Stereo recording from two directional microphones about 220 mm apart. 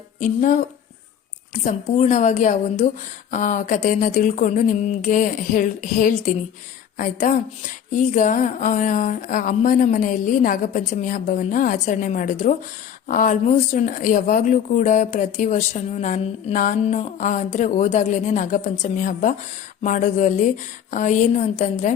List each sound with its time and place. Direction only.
0.2 s speech: 35° left (ahead or behind)
1.6 s speech: 30° left (ahead or behind)